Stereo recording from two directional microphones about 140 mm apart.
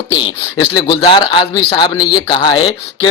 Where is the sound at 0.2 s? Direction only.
35° left (ahead or behind).